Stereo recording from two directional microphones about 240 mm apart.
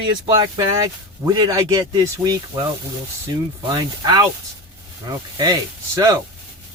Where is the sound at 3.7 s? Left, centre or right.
Centre.